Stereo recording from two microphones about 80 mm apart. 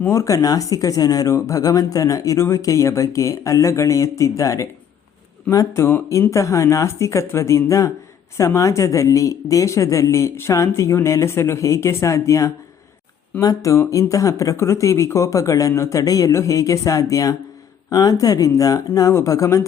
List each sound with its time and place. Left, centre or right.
0.1 s speech: left